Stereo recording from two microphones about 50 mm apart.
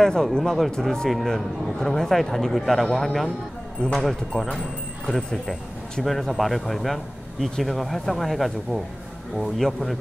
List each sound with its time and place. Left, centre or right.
0.0 s a man's voice: centre